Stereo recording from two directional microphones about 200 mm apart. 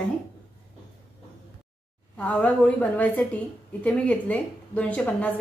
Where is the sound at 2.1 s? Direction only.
5° left (ahead or behind).